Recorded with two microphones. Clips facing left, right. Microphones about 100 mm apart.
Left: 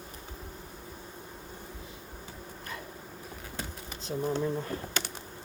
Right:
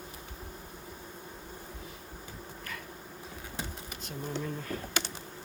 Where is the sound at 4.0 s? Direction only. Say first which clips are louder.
Left 7 dB; 30° left (ahead or behind).